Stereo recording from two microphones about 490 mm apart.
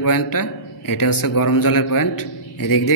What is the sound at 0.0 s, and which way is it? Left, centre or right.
A man's voice, left.